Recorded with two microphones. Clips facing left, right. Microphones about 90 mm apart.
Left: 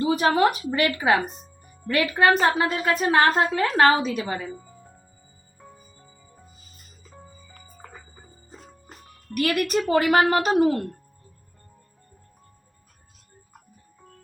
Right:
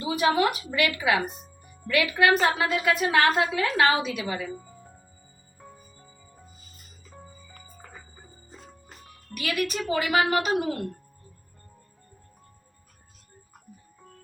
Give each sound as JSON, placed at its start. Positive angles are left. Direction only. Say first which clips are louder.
{"t": 0.0, "sound": "a woman's voice", "louder": "left 3 dB", "side_deg": 40}
{"t": 1.3, "sound": "music", "louder": "even", "side_deg": -10}
{"t": 1.9, "sound": "a woman's voice", "louder": "left 2 dB", "side_deg": 35}
{"t": 4.5, "sound": "music", "louder": "right 1 dB", "side_deg": 0}
{"t": 9.3, "sound": "speech", "louder": "left 6 dB", "side_deg": 45}